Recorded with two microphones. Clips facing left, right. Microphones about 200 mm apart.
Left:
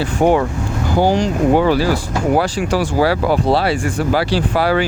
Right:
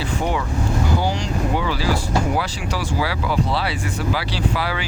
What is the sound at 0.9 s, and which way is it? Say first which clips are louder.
Speech: left 8 dB; 50° left (ahead or behind).